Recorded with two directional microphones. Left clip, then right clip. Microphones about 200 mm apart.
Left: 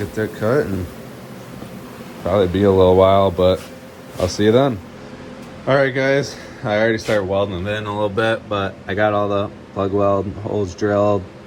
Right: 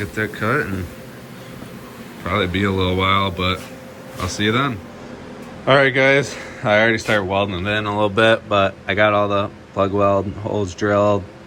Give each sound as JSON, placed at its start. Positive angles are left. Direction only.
{"t": 0.0, "sound": "speech", "side_deg": 20}
{"t": 2.2, "sound": "speech", "side_deg": 20}
{"t": 5.6, "sound": "speech", "side_deg": 10}